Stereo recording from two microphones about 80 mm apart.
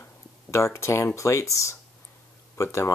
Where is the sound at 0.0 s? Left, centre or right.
Left.